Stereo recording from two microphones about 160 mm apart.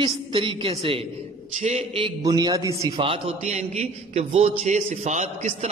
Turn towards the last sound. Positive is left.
turn(degrees=-45)  # may be behind; listen again after turning